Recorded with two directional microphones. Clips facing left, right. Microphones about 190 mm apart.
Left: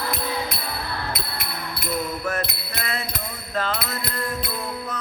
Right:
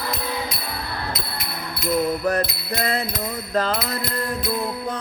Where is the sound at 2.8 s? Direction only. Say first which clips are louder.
Right 6 dB; 35° right (ahead or behind).